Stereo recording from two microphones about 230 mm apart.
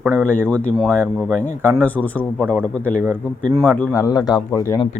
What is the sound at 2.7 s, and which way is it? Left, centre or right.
Speech, centre.